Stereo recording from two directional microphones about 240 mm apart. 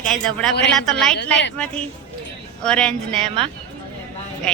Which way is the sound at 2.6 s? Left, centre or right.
Centre.